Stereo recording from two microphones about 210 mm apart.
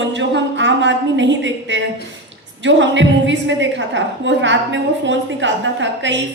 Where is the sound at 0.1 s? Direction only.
60° right (ahead or behind).